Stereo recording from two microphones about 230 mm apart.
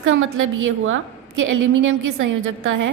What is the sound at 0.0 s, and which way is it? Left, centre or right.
A woman's voice, right.